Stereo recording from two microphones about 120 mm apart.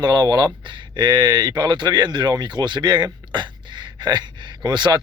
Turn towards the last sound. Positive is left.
turn(degrees=-40)  # may be behind; listen again after turning